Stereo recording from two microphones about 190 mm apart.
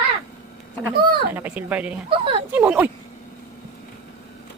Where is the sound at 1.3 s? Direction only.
10° right (ahead or behind).